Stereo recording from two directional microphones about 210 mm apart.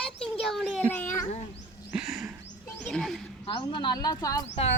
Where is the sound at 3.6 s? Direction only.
20° left (ahead or behind).